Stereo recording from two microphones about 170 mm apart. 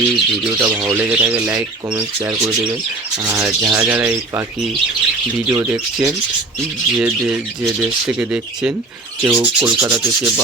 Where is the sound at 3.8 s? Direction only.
5° right (ahead or behind).